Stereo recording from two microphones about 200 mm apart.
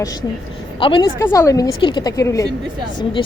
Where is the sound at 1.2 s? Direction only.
15° left (ahead or behind).